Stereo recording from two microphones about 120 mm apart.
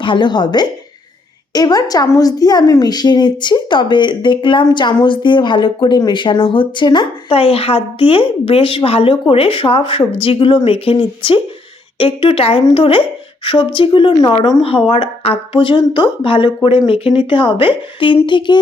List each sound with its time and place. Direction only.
0.0 s a woman's voice: 40° left (ahead or behind)
14.6 s a woman's voice: 50° left (ahead or behind)